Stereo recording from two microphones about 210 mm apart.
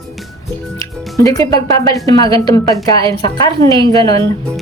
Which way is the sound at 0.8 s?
15° left (ahead or behind).